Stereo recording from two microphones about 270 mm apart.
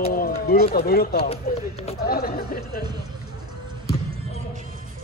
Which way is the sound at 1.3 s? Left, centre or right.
Left.